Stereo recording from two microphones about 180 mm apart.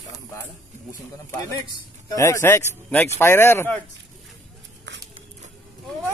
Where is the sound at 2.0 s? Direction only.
15° left (ahead or behind).